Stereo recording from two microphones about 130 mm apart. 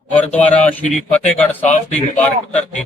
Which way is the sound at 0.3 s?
10° left (ahead or behind).